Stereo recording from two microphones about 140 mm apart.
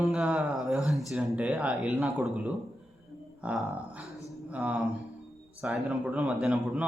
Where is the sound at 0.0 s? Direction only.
5° right (ahead or behind).